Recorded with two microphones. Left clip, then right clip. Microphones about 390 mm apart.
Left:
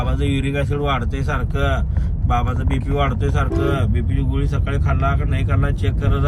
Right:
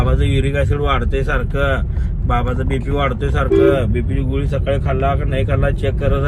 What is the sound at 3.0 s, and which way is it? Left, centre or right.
Speech, centre.